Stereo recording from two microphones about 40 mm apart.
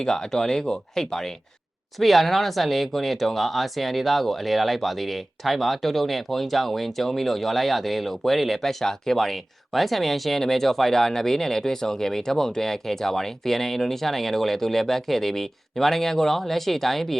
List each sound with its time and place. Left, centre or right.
0.0 s speech: centre
8.8 s speech: centre